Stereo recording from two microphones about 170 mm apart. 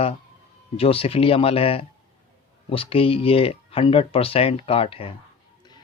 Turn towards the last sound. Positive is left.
turn(degrees=35)  # may be behind; listen again after turning